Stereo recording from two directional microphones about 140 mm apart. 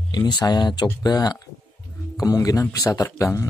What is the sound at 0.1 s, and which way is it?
Speech, 30° left (ahead or behind).